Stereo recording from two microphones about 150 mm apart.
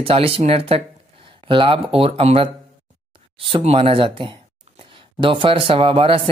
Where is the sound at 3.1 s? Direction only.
35° right (ahead or behind).